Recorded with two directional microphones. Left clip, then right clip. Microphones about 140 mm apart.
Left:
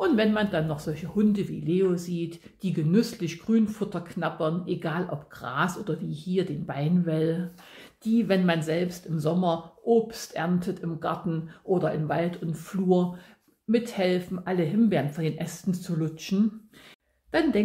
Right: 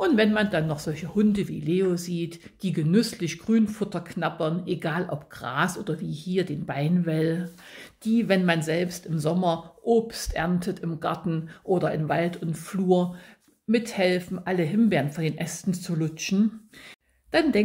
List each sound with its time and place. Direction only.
0.0 s speech: 40° right (ahead or behind)